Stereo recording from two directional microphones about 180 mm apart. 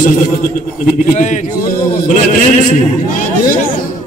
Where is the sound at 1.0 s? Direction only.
45° left (ahead or behind).